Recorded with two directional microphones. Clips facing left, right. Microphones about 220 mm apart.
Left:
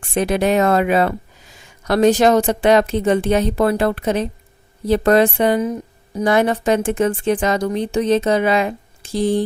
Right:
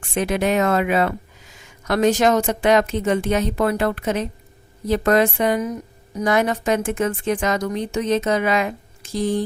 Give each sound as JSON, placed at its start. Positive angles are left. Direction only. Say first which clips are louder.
{"t": 0.0, "sound": "a woman's voice", "louder": "left 3 dB", "side_deg": 35}